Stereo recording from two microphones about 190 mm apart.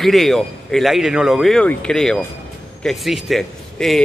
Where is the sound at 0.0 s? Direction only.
Centre (ahead or behind).